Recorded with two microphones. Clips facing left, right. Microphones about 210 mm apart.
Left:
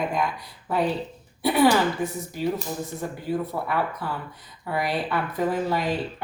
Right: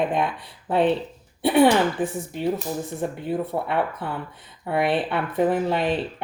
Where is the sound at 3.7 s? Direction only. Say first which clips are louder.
Right 2 dB; 25° right (ahead or behind).